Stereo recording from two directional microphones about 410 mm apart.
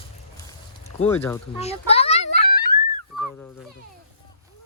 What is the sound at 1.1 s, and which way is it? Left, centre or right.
Children playing, centre.